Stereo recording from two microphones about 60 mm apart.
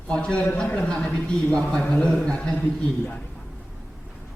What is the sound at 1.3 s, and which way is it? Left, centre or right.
A man's voice, centre.